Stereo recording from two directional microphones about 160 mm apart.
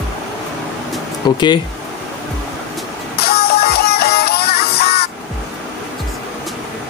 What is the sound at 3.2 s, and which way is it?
Music, 80° left.